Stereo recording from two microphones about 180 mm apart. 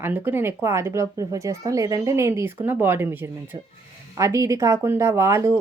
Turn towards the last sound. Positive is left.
turn(degrees=-15)  # may be behind; listen again after turning